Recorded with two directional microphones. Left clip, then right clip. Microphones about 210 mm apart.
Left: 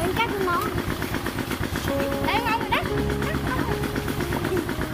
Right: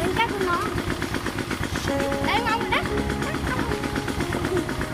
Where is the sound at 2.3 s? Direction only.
5° right (ahead or behind).